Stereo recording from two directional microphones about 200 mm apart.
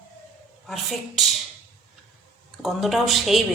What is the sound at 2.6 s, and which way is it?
Speech, centre (ahead or behind).